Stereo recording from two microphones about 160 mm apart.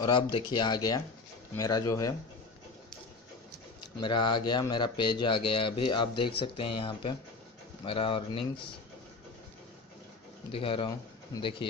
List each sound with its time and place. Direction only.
0.0 s speech: 30° left (ahead or behind)
4.2 s speech: 30° left (ahead or behind)
10.5 s speech: 35° left (ahead or behind)
11.3 s speech: 25° left (ahead or behind)